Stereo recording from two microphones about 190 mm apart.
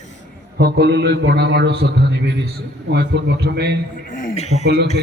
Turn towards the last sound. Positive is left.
turn(degrees=-60)  # may be behind; listen again after turning